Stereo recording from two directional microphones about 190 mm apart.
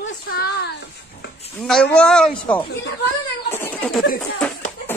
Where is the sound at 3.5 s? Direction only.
10° left (ahead or behind).